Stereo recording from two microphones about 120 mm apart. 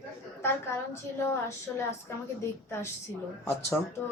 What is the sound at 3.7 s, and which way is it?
Speech, 15° left (ahead or behind).